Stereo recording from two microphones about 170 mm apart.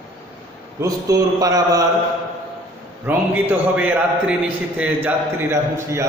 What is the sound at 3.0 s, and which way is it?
A man's voice, 10° right (ahead or behind).